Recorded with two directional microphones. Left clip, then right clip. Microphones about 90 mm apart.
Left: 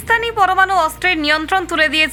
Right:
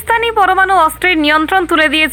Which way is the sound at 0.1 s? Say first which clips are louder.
Right 3 dB; 35° right (ahead or behind).